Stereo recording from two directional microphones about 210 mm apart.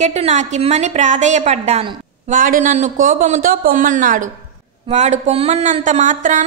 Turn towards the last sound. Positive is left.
turn(degrees=-35)  # may be behind; listen again after turning